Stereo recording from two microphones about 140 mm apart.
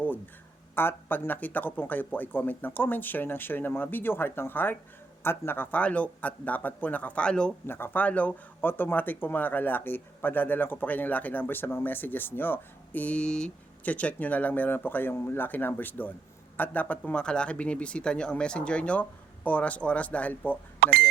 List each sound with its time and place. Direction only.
0.8 s a man's voice: 15° left (ahead or behind)
20.7 s speech: 90° right